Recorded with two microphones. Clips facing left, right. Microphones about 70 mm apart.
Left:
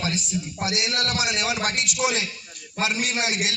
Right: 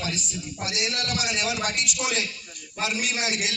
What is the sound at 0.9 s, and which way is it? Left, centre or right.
A man's voice, left.